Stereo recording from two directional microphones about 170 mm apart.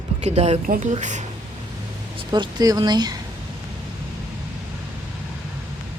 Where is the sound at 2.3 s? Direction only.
25° right (ahead or behind).